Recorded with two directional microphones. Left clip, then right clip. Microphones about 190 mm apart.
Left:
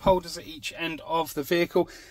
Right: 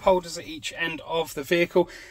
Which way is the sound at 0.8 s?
30° left (ahead or behind).